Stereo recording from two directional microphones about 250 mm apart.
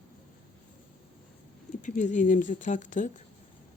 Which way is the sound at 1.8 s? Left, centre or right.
Left.